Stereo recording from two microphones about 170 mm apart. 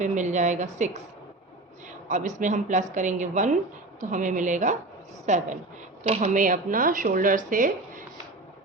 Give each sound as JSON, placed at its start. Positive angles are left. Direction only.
{"t": 0.0, "sound": "speech", "side_deg": -45}
{"t": 2.0, "sound": "speech", "side_deg": -45}